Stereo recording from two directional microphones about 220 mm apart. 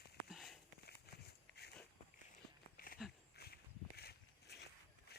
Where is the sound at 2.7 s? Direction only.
40° left (ahead or behind).